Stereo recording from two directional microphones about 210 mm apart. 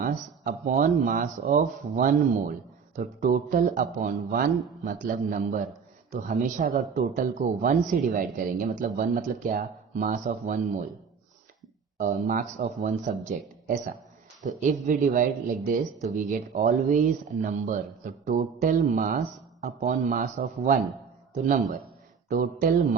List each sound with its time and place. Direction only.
0.0 s speech: 40° right (ahead or behind)
11.9 s speech: 35° right (ahead or behind)
14.4 s speech: 35° right (ahead or behind)